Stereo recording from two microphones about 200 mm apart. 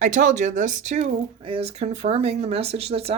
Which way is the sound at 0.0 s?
35° right (ahead or behind).